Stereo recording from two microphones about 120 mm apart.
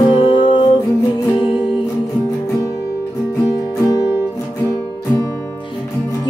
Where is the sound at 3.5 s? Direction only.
30° left (ahead or behind).